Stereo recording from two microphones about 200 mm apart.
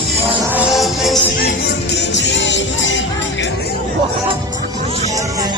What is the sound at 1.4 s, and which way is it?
Music, 60° left (ahead or behind).